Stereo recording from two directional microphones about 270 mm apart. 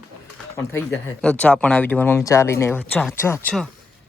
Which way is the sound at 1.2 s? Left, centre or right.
Centre.